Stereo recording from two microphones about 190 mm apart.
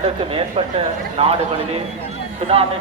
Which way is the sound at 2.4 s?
30° right (ahead or behind).